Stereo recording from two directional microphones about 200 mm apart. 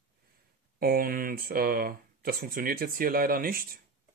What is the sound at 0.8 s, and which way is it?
Speech, 45° right (ahead or behind).